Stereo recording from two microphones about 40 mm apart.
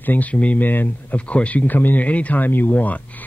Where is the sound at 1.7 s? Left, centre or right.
Left.